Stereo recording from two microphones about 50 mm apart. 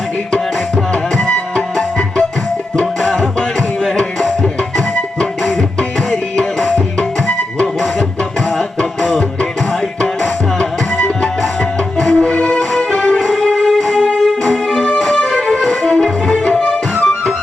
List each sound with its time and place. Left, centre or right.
1.2 s music: centre
2.7 s music: centre
5.4 s music: centre
9.0 s music: centre
10.6 s music: centre